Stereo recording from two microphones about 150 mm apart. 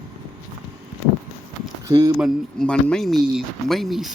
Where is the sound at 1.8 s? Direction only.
25° right (ahead or behind).